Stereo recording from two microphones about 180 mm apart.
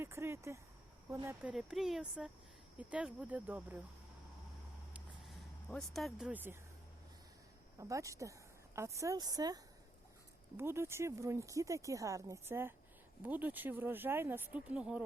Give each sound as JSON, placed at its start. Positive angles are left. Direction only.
{"t": 0.0, "sound": "a sound", "side_deg": -15}
{"t": 1.0, "sound": "speech", "side_deg": -15}
{"t": 1.5, "sound": "speech", "side_deg": 0}
{"t": 5.6, "sound": "speech", "side_deg": 5}
{"t": 7.8, "sound": "speech", "side_deg": -15}
{"t": 10.6, "sound": "speech", "side_deg": -15}